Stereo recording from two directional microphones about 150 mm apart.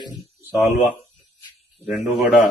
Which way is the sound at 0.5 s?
20° right (ahead or behind).